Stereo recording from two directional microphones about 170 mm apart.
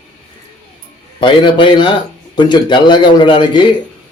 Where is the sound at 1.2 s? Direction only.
30° left (ahead or behind).